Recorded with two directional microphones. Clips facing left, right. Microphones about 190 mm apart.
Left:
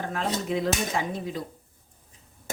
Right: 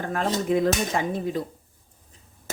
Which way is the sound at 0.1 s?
45° right (ahead or behind).